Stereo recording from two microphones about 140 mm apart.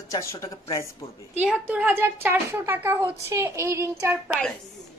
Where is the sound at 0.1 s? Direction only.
20° left (ahead or behind).